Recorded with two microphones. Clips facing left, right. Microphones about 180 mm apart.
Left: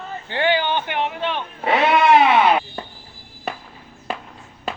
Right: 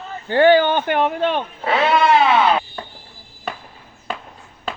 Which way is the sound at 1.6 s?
15° left (ahead or behind).